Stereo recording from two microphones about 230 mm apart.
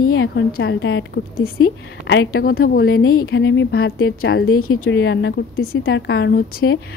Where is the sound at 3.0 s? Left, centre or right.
Left.